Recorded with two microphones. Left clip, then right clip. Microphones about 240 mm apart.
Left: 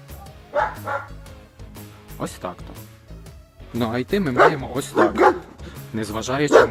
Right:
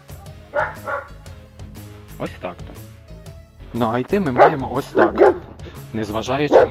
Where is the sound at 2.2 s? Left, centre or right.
Centre.